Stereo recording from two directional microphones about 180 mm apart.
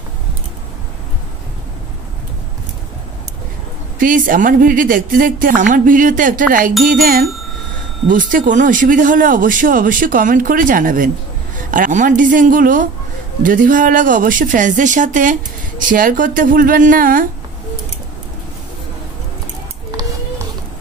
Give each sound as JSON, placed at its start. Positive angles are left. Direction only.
{"t": 4.0, "sound": "a man's voice", "side_deg": -50}